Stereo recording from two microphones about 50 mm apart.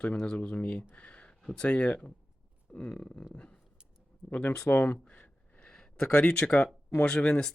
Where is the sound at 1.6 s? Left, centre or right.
Left.